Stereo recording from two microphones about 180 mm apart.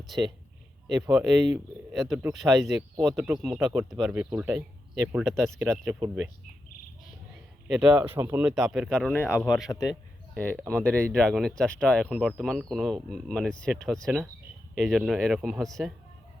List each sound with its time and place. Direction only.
0.0 s speech: centre (ahead or behind)
7.7 s speech: 5° right (ahead or behind)
9.6 s a man's voice: 20° left (ahead or behind)
9.9 s a sound: 10° right (ahead or behind)
10.6 s speech: 5° left (ahead or behind)